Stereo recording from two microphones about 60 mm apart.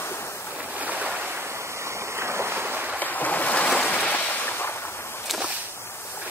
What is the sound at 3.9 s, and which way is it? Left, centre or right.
Waves, left.